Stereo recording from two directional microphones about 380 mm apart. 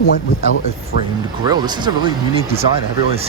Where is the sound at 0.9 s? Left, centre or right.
Left.